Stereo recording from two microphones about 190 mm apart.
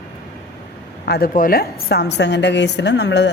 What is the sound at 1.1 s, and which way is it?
A woman's voice, 50° left (ahead or behind).